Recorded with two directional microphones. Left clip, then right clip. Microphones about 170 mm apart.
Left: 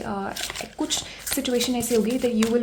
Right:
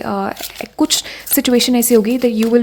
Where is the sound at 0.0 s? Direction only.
40° right (ahead or behind).